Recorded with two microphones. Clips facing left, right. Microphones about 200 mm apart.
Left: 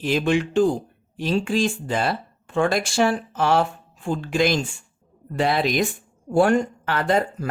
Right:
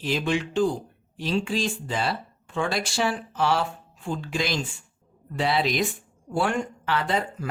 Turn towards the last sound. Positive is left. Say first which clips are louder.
# left 5 dB
turn(degrees=50)  # may be behind; listen again after turning